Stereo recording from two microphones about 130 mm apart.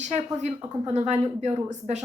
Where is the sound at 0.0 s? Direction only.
65° right (ahead or behind).